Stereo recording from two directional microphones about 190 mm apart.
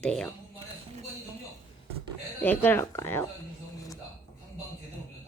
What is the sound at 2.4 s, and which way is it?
Speech, 10° left (ahead or behind).